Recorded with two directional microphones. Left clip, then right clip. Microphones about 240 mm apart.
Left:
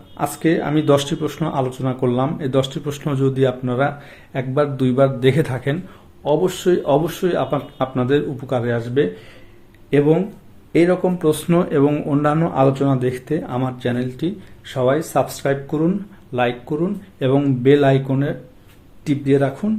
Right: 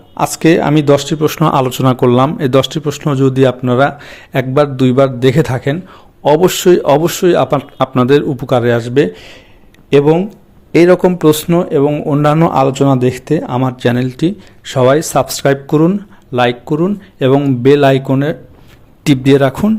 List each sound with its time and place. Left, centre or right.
0.2 s a man's voice: right
11.4 s a man's voice: centre; by 19.7 s right